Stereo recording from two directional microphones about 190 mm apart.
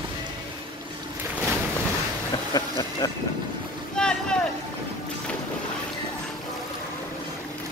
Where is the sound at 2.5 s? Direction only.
20° left (ahead or behind).